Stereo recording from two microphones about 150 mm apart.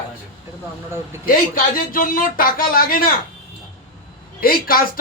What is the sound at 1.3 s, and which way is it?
Speech, 75° left (ahead or behind).